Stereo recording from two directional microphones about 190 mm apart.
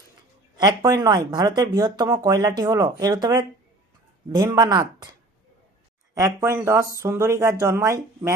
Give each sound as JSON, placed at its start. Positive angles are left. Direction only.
{"t": 0.6, "sound": "speech", "side_deg": -20}
{"t": 6.1, "sound": "speech", "side_deg": -15}